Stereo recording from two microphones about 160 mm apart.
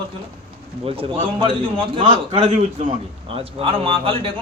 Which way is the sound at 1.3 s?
30° right (ahead or behind).